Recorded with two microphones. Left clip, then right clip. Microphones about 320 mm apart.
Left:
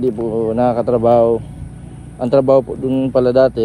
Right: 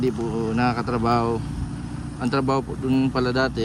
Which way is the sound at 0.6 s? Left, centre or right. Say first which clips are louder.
Left 10 dB; centre.